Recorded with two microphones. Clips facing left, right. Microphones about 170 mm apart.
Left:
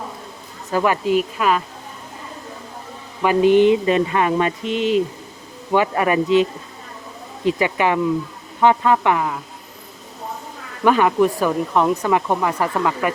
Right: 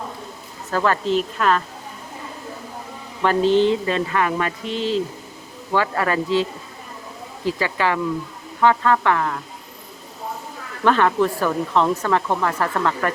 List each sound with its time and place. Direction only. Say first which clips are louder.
0.7 s speech: left 2 dB; 15° left (ahead or behind)
3.2 s speech: left 3 dB; 15° left (ahead or behind)
10.8 s speech: left 2 dB; 10° left (ahead or behind)